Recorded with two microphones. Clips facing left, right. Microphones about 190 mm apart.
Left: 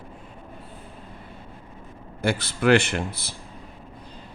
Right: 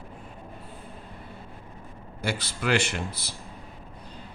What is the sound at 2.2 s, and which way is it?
A man's voice, 55° left (ahead or behind).